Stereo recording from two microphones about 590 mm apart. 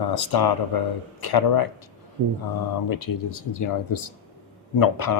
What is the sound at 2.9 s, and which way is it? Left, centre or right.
Speech, left.